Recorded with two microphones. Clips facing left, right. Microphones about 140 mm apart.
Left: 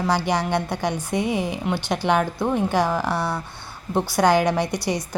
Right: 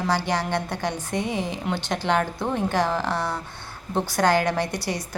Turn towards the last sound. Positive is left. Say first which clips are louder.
# left 3 dB
turn(degrees=15)  # may be behind; listen again after turning